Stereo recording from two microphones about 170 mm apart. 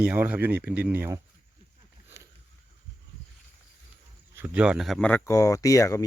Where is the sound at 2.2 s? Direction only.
20° right (ahead or behind).